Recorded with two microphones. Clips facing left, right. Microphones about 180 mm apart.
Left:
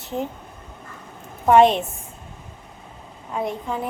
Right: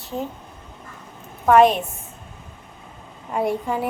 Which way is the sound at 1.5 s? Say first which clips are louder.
Even; 25° left (ahead or behind).